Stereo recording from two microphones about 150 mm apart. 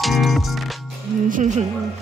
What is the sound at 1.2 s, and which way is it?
Music, 60° right (ahead or behind).